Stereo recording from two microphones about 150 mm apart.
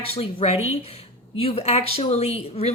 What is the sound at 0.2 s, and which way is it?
A woman's voice, 40° left (ahead or behind).